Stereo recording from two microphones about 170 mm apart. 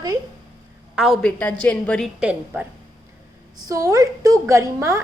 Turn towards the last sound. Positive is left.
turn(degrees=-15)  # may be behind; listen again after turning